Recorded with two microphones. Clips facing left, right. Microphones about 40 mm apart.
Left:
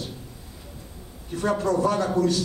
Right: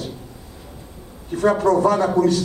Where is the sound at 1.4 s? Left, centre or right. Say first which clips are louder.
Right 7 dB; right.